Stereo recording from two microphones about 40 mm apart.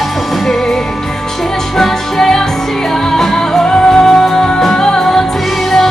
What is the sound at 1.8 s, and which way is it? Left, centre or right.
Music, centre.